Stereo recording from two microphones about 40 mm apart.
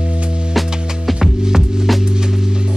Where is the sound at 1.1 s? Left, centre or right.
Centre.